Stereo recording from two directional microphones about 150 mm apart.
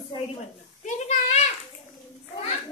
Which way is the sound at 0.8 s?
50° left (ahead or behind).